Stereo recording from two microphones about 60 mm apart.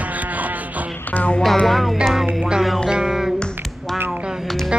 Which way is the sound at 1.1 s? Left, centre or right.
Left.